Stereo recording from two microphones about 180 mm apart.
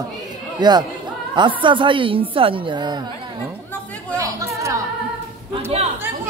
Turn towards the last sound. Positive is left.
turn(degrees=-35)  # may be behind; listen again after turning